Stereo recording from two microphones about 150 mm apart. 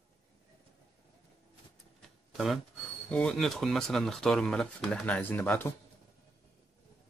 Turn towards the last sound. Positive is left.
turn(degrees=15)  # may be behind; listen again after turning